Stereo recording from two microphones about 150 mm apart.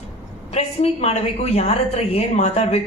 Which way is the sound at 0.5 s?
45° left (ahead or behind).